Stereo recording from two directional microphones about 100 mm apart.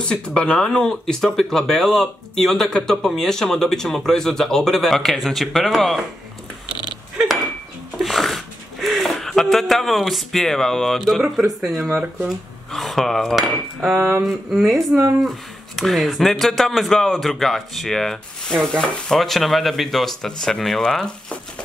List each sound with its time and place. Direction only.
0.0 s speech: 10° left (ahead or behind)
8.0 s a sound: centre (ahead or behind)
11.6 s speech: centre (ahead or behind)
11.9 s speech: 15° right (ahead or behind)
12.7 s speech: centre (ahead or behind)
13.9 s a sound: 25° right (ahead or behind)
14.2 s speech: centre (ahead or behind)